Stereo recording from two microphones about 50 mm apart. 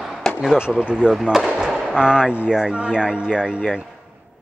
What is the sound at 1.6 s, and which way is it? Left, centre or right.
Fireworks, centre.